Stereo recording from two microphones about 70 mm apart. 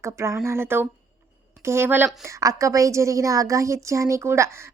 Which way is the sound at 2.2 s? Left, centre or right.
Right.